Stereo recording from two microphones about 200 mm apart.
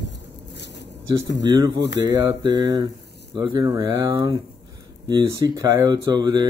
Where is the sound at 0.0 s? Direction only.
60° left (ahead or behind).